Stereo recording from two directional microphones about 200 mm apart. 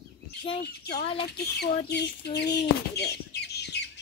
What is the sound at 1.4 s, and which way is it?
Chicken, 55° left (ahead or behind).